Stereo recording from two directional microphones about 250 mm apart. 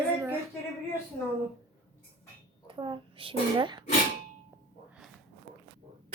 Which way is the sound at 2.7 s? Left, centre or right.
Centre.